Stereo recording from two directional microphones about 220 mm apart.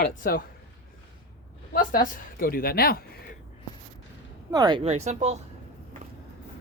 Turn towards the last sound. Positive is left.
turn(degrees=-30)  # may be behind; listen again after turning